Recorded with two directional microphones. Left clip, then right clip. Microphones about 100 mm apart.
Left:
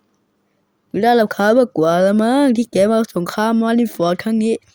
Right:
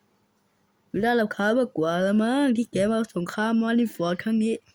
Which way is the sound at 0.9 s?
35° left (ahead or behind).